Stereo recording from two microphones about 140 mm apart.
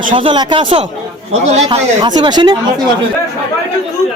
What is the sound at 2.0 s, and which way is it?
Speech, 30° right (ahead or behind).